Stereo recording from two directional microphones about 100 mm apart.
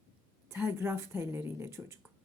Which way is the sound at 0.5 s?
25° right (ahead or behind).